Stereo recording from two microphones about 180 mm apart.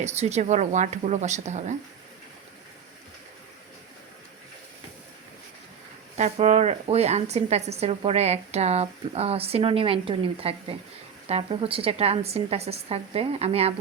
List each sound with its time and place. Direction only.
0.0 s a woman's voice: 40° right (ahead or behind)
6.1 s a woman's voice: 40° right (ahead or behind)